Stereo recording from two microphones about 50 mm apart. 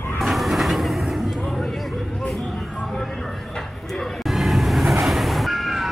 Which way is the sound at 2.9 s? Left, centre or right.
Centre.